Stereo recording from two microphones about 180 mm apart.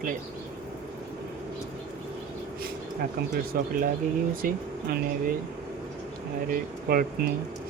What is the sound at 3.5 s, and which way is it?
Speech, 55° right (ahead or behind).